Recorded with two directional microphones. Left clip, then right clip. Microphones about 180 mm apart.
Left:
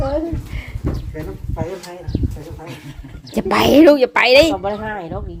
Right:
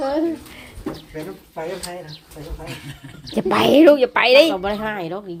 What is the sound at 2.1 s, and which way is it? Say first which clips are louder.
Speech: left 17 dB; 15° left (ahead or behind).